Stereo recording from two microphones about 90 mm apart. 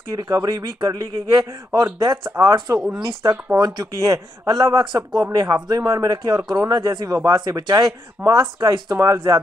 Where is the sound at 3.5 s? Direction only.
50° right (ahead or behind).